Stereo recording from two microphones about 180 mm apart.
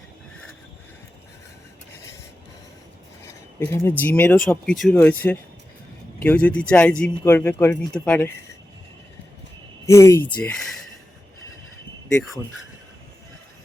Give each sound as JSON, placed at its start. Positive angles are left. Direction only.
{"t": 3.2, "sound": "speech", "side_deg": 15}
{"t": 9.8, "sound": "speech", "side_deg": 15}